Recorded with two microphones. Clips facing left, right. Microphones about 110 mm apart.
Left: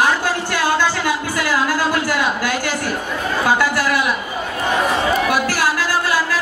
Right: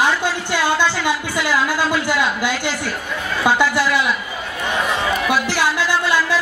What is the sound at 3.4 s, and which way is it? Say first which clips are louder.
Speech: right 1 dB; 20° right (ahead or behind).